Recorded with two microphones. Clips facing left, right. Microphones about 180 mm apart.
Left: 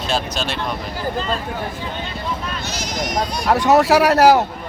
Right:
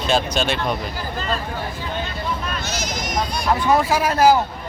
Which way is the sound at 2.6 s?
35° left (ahead or behind).